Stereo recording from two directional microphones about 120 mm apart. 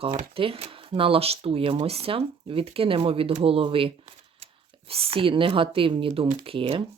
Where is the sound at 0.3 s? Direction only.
50° right (ahead or behind).